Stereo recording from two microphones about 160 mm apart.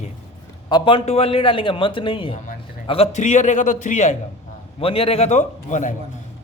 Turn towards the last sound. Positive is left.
turn(degrees=50)  # may be behind; listen again after turning